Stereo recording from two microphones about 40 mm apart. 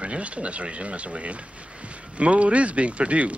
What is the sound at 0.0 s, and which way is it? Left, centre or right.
Speech, right.